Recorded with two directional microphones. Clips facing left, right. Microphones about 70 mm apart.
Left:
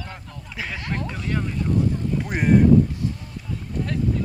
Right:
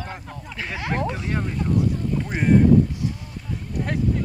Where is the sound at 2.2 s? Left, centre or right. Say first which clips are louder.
Left 1 dB; centre.